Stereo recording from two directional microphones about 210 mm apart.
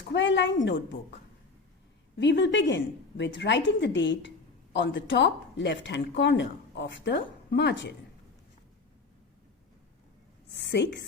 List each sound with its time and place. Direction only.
0.1 s speech: 60° left (ahead or behind)
2.1 s speech: 55° left (ahead or behind)
10.5 s a woman's voice: 55° left (ahead or behind)